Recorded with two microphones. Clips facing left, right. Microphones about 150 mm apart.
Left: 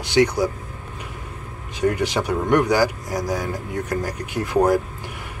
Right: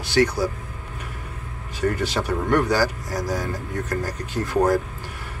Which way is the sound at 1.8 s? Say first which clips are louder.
Left 3 dB; 15° left (ahead or behind).